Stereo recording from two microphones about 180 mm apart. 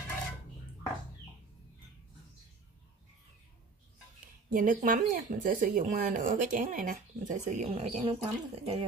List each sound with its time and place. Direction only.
4.5 s speech: 50° right (ahead or behind); by 8.8 s 35° right (ahead or behind)